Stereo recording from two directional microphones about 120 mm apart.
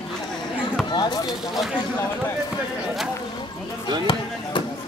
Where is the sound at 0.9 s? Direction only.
35° left (ahead or behind).